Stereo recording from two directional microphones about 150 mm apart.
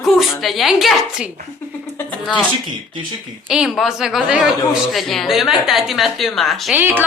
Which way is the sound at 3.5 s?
5° right (ahead or behind).